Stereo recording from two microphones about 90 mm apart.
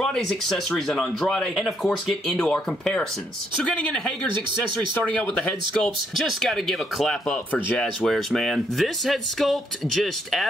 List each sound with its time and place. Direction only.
0.0 s speech: 5° left (ahead or behind)
4.9 s speech: 15° left (ahead or behind)
6.1 s speech: centre (ahead or behind)